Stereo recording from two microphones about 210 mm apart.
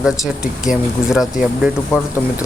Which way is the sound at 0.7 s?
Centre (ahead or behind).